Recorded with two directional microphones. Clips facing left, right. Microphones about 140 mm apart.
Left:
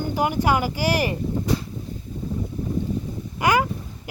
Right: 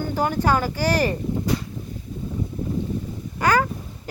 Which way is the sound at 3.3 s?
15° left (ahead or behind).